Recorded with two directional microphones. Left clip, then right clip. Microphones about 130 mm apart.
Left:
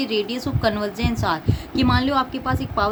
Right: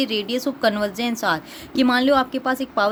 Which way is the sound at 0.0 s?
65° right (ahead or behind).